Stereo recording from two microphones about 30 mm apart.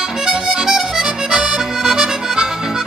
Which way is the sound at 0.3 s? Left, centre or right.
Centre.